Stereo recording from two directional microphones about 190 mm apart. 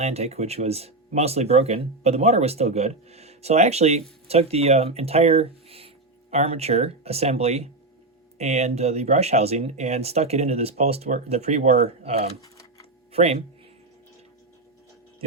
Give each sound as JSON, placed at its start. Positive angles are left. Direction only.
{"t": 0.0, "sound": "speech", "side_deg": -35}
{"t": 12.4, "sound": "typing", "side_deg": 20}
{"t": 13.1, "sound": "speech", "side_deg": -35}